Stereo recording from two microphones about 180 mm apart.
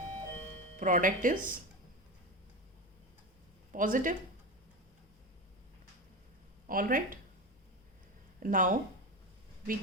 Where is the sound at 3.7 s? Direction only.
45° right (ahead or behind).